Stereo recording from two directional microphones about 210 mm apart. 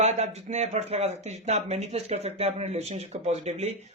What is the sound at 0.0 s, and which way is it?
A man's voice, 30° right (ahead or behind).